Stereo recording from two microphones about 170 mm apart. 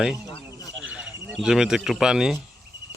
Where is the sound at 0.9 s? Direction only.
5° right (ahead or behind).